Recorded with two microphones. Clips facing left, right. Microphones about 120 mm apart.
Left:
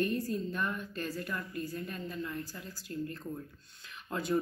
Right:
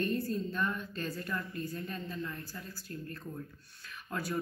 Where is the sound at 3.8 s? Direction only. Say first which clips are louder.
Left 3 dB; 20° left (ahead or behind).